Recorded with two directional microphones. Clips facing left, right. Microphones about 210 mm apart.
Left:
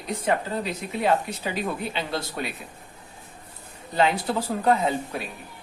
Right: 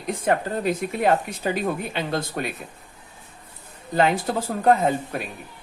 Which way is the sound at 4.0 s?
50° right (ahead or behind).